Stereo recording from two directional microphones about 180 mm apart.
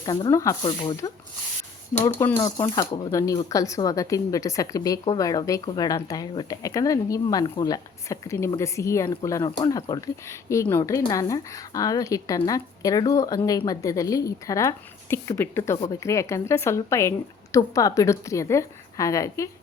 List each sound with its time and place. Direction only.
0.0 s speech: 25° left (ahead or behind)
2.2 s a woman's voice: 15° left (ahead or behind)